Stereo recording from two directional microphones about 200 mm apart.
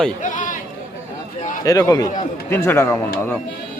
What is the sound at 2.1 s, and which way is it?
Speech, 40° left (ahead or behind).